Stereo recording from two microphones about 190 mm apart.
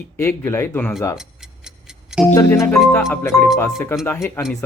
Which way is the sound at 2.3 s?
10° left (ahead or behind).